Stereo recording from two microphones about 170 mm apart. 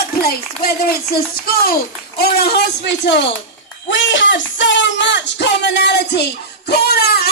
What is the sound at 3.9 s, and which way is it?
Music, 90° left.